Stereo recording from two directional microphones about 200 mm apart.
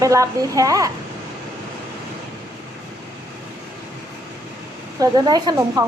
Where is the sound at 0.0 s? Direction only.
15° right (ahead or behind).